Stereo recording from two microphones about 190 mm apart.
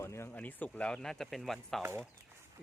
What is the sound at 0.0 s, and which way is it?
Speech, 15° left (ahead or behind).